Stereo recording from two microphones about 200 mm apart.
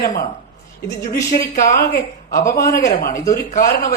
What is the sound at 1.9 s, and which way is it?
Speech, 50° left (ahead or behind).